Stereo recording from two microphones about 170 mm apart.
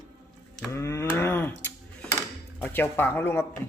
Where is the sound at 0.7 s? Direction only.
15° left (ahead or behind).